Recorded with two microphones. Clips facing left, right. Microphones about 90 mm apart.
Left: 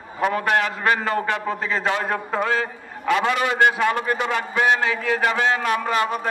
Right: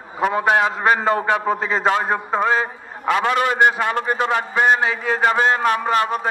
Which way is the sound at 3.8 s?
30° right (ahead or behind).